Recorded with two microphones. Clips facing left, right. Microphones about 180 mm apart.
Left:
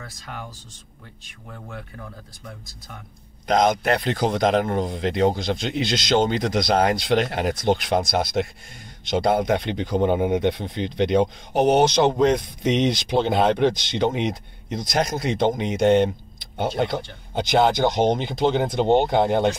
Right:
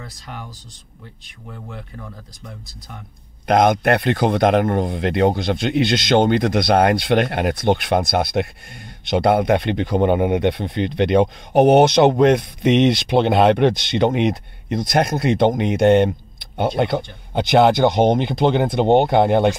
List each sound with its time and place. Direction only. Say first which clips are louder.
3.4 s speech: right 4 dB; 60° right (ahead or behind)